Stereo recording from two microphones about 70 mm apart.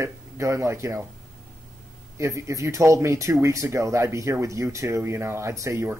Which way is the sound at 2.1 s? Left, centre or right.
Right.